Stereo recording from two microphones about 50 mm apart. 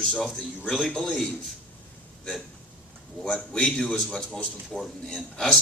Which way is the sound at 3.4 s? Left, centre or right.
Centre.